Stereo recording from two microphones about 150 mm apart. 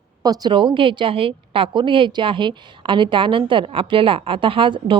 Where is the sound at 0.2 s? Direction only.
25° right (ahead or behind).